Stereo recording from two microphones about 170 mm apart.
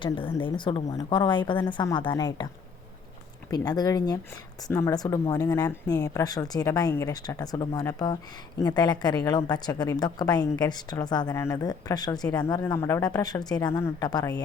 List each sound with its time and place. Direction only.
0.0 s speech: 30° left (ahead or behind)
3.5 s speech: 25° left (ahead or behind)